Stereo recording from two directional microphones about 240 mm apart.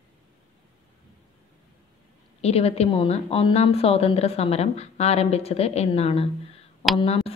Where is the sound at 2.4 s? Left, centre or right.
Left.